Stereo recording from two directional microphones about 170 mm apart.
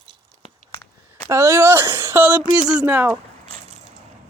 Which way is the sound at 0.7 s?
15° left (ahead or behind).